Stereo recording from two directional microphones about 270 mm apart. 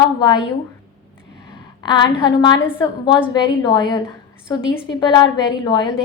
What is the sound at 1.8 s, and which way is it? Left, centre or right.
A woman's voice, centre.